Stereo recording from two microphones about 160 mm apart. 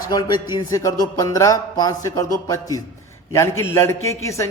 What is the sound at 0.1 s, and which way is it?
A man's voice, 25° left (ahead or behind).